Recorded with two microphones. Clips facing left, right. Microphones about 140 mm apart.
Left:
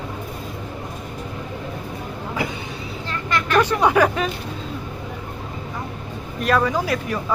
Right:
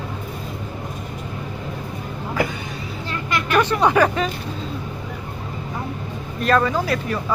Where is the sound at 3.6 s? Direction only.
10° left (ahead or behind).